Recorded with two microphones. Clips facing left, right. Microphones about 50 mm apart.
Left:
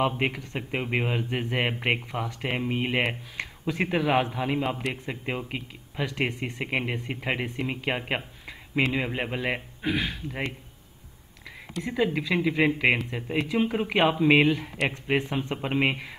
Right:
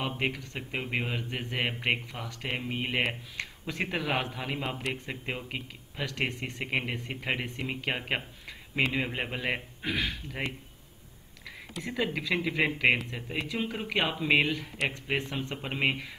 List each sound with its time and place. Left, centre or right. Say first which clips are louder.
0.2 s speech: left 4 dB; centre
11.9 s speech: left 4 dB; centre